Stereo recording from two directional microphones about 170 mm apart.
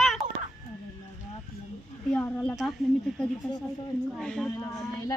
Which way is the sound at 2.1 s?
5° left (ahead or behind).